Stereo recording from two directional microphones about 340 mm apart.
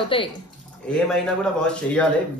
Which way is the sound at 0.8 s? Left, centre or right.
Centre.